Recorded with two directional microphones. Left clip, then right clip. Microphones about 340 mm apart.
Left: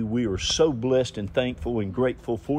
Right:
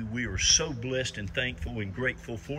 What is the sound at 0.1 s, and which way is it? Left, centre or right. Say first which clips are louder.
Speech: right 2 dB; left.